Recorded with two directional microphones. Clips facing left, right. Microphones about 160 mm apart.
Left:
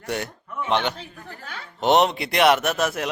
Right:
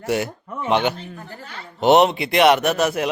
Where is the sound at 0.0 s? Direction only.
5° right (ahead or behind).